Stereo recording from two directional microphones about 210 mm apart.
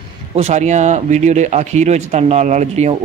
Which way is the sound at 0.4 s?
30° right (ahead or behind).